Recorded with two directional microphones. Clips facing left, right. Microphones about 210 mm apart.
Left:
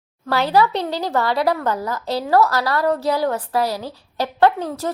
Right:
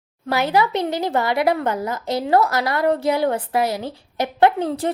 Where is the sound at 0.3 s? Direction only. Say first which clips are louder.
Left 1 dB; 20° right (ahead or behind).